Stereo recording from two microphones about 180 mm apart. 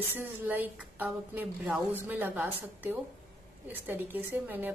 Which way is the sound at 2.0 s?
10° right (ahead or behind).